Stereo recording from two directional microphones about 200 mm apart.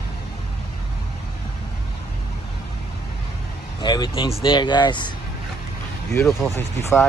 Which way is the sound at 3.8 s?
20° left (ahead or behind).